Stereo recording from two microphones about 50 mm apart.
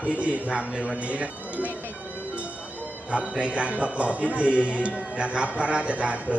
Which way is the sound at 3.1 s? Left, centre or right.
Right.